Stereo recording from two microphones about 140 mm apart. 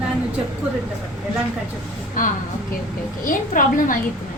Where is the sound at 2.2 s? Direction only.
80° left.